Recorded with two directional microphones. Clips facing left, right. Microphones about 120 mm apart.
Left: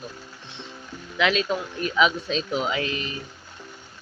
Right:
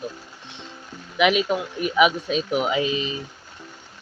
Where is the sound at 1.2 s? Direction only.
15° right (ahead or behind).